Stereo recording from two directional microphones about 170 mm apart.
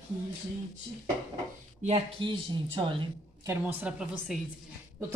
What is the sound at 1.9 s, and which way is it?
Speech, 30° right (ahead or behind).